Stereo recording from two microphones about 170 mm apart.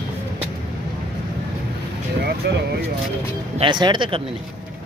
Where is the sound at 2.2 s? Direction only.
75° right (ahead or behind).